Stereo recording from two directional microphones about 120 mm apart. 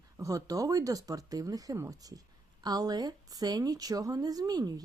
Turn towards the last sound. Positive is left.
turn(degrees=-35)  # may be behind; listen again after turning